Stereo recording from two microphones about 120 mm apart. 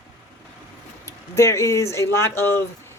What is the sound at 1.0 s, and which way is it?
Speech, 25° left (ahead or behind).